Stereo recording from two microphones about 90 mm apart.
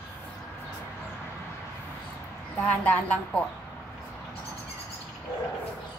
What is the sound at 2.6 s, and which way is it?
Speech, 15° left (ahead or behind).